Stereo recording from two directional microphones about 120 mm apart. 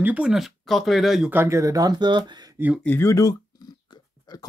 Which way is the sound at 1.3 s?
20° right (ahead or behind).